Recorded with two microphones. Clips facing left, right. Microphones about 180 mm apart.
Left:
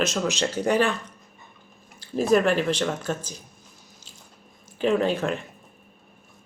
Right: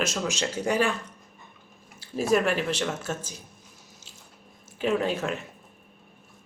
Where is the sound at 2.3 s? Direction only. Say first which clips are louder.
Left 3 dB; 5° right (ahead or behind).